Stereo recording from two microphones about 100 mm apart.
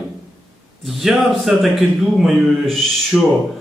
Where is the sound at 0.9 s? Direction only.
Centre (ahead or behind).